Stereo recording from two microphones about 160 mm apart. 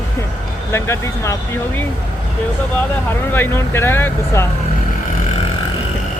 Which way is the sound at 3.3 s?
15° left (ahead or behind).